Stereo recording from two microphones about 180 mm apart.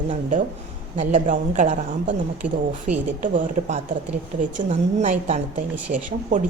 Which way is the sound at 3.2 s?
40° right (ahead or behind).